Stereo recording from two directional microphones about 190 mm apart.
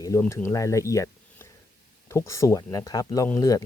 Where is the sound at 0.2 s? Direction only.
10° left (ahead or behind).